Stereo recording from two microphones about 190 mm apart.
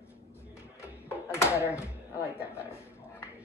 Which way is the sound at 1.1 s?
15° left (ahead or behind).